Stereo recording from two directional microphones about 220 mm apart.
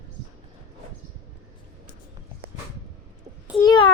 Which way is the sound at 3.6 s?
20° left (ahead or behind).